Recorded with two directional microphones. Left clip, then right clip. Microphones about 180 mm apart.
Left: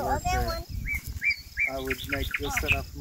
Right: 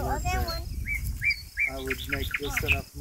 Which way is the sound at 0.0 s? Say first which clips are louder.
Left 3 dB; 40° left (ahead or behind).